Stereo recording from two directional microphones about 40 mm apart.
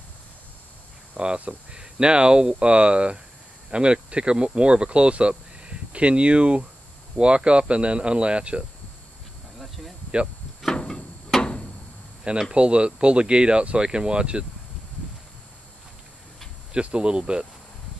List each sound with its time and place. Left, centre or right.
1.1 s speech: right
9.6 s cricket: centre
11.3 s a sound: centre
12.3 s speech: centre
16.7 s speech: right